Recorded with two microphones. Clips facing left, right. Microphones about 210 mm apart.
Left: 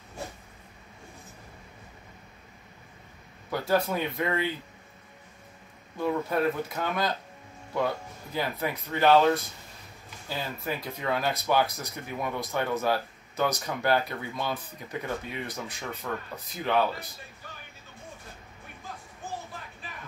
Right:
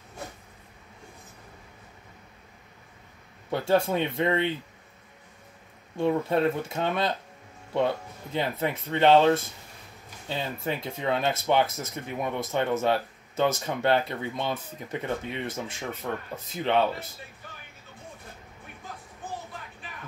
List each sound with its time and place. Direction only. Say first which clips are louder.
3.4 s speech: right 3 dB; 25° right (ahead or behind)
5.9 s speech: right 3 dB; 25° right (ahead or behind)